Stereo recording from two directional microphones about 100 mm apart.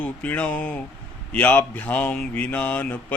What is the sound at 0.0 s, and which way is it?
A man's voice, 15° left (ahead or behind).